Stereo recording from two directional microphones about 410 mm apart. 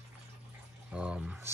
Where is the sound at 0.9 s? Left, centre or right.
Centre.